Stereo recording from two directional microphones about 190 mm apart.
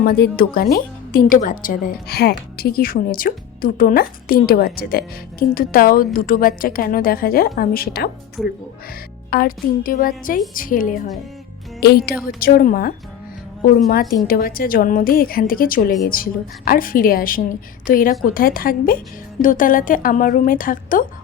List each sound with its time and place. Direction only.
0.0 s speech: 50° left (ahead or behind)
8.4 s speech: centre (ahead or behind)
9.3 s speech: 50° left (ahead or behind)
14.3 s speech: 50° left (ahead or behind)